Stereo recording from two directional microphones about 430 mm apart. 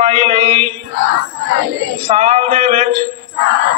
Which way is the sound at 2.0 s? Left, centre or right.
Centre.